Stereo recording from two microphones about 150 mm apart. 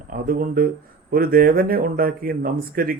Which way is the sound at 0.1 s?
65° right (ahead or behind).